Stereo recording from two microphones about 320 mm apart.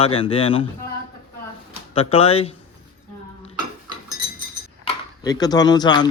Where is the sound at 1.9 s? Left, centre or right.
Centre.